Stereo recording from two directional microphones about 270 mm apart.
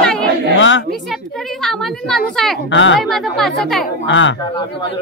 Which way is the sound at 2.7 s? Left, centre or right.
Left.